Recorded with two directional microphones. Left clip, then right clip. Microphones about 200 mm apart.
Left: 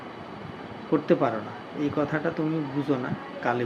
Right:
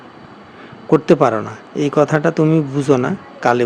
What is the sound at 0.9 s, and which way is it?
Speech, 60° right (ahead or behind).